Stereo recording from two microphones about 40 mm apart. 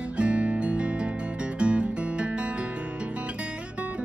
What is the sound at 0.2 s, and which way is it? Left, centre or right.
Music, right.